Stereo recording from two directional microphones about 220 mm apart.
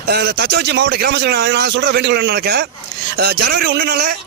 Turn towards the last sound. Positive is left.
turn(degrees=-50)  # may be behind; listen again after turning